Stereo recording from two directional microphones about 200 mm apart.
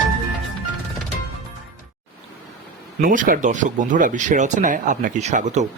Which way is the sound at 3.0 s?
45° right (ahead or behind).